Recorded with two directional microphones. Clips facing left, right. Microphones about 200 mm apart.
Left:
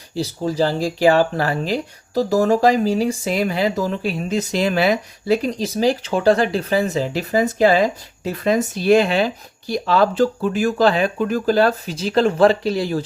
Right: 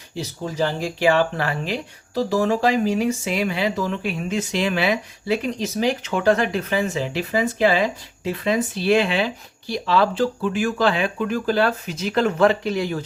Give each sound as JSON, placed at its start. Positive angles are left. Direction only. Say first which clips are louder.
{"t": 0.1, "sound": "speech", "louder": "left 6 dB", "side_deg": 35}